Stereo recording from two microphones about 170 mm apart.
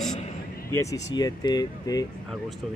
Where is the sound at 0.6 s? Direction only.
15° left (ahead or behind).